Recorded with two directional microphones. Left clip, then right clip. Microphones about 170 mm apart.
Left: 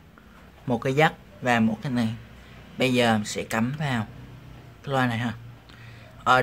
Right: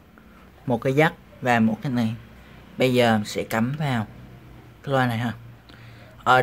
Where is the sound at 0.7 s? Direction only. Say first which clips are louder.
Right 1 dB; 10° right (ahead or behind).